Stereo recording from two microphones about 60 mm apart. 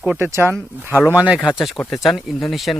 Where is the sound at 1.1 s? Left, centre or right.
Right.